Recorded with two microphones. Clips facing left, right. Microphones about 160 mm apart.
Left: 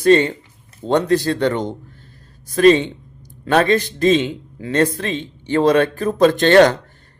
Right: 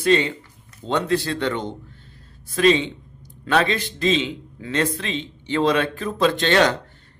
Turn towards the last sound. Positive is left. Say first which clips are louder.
# left 7 dB
turn(degrees=50)  # may be behind; listen again after turning